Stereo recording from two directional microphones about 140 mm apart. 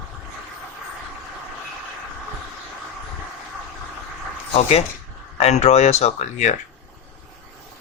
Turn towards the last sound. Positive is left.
turn(degrees=55)  # may be behind; listen again after turning